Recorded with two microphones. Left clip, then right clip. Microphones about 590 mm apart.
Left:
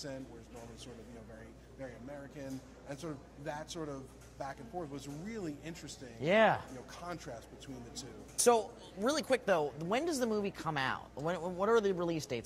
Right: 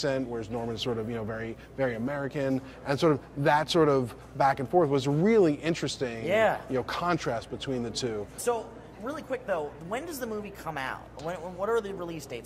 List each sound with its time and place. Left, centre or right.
0.0 s a man's voice: right
6.2 s speech: left
6.9 s a man's voice: right
9.0 s speech: left